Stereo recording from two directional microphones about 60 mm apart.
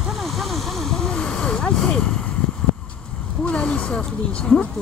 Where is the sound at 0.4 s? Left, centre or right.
Centre.